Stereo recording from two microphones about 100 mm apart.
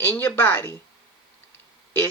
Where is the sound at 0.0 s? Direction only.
20° left (ahead or behind).